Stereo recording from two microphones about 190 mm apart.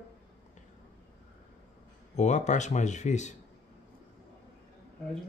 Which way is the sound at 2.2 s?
40° left (ahead or behind).